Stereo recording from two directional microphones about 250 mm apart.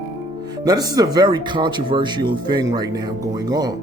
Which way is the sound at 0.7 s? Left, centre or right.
Centre.